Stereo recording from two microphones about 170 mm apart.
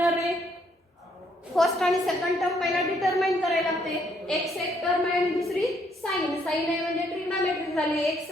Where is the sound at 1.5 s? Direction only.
Centre (ahead or behind).